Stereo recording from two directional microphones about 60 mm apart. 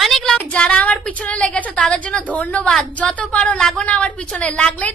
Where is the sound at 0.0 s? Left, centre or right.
Centre.